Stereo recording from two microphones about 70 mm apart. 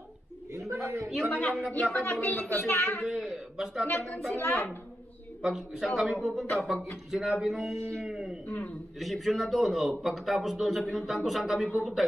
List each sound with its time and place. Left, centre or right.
0.5 s a sound: right
1.3 s a man's voice: left
1.8 s speech: centre
2.6 s a woman's voice: left
3.0 s a man's voice: centre
4.4 s a woman's voice: left
5.4 s speech: centre
8.5 s a man's voice: centre
9.0 s speech: centre